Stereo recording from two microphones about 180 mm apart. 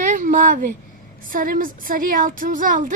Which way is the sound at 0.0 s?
45° right (ahead or behind).